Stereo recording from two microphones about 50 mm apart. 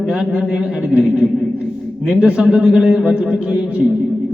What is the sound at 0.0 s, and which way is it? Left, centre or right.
A man's voice, right.